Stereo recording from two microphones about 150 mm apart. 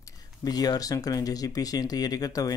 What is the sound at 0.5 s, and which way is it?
Speech, 25° left (ahead or behind).